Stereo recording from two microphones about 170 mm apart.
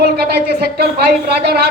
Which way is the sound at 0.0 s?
70° right (ahead or behind).